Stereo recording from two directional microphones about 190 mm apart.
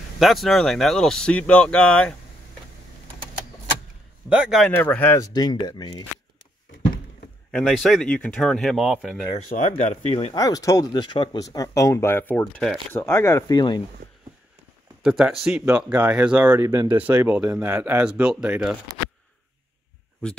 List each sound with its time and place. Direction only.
0.2 s speech: centre (ahead or behind)
4.3 s speech: 5° right (ahead or behind); by 6.0 s 20° left (ahead or behind)
7.5 s speech: centre (ahead or behind)
9.5 s speech: 40° left (ahead or behind)
10.3 s speech: 20° left (ahead or behind)
15.0 s speech: 5° right (ahead or behind)